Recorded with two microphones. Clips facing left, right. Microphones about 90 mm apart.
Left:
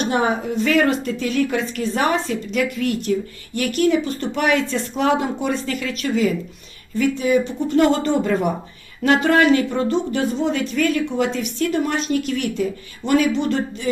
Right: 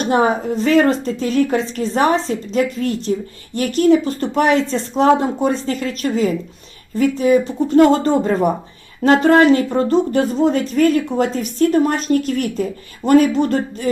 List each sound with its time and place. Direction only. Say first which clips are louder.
0.0 s speech: right 4 dB; 35° right (ahead or behind)